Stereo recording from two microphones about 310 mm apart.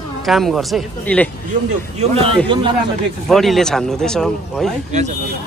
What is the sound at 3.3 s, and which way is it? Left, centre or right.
Speech, centre.